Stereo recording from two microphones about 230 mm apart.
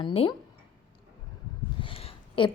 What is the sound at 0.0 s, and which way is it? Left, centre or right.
Speech, left.